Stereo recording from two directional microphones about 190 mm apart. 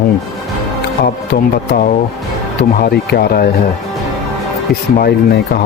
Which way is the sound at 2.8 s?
55° left (ahead or behind).